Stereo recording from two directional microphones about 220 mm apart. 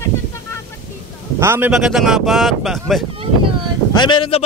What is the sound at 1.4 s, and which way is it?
Speech, 10° right (ahead or behind).